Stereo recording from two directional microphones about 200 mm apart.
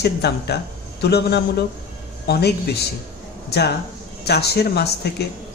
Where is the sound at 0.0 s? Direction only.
55° left (ahead or behind).